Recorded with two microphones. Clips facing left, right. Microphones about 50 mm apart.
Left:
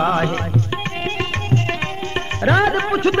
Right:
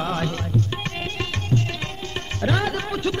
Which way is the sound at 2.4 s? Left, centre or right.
Left.